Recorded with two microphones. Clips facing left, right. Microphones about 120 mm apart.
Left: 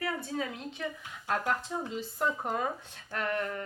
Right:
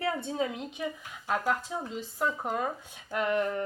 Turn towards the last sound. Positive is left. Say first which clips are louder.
# right 5 dB
turn(degrees=-20)  # may be behind; listen again after turning